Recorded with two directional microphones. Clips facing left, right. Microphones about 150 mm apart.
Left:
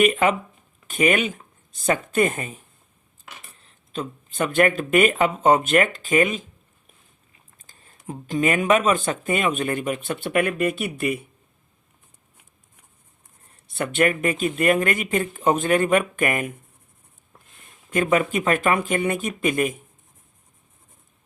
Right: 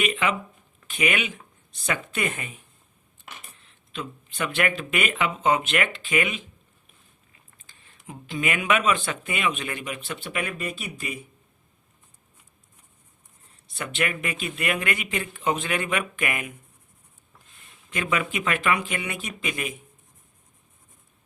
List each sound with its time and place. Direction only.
0.0 s speech: 50° left (ahead or behind)
3.6 s speech: 40° left (ahead or behind)
7.7 s speech: 40° left (ahead or behind); by 11.2 s 60° left (ahead or behind)
13.7 s speech: 55° left (ahead or behind)
17.9 s speech: 45° left (ahead or behind)